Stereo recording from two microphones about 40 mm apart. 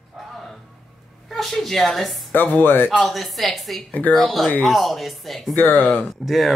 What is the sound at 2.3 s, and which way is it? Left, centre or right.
Speech, left.